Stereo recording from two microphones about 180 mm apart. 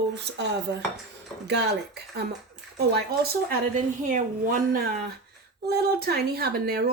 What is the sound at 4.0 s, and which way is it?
Speech, 45° right (ahead or behind).